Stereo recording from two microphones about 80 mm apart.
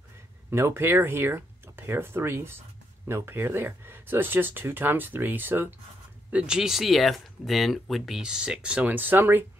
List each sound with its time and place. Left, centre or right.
0.5 s speech: right
6.3 s speech: centre; by 9.5 s right